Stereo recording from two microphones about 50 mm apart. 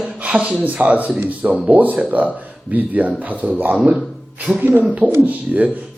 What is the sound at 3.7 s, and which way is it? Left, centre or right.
Speech, right.